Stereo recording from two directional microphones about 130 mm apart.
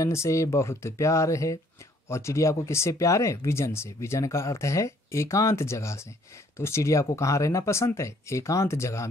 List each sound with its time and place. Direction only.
0.0 s speech: 20° left (ahead or behind)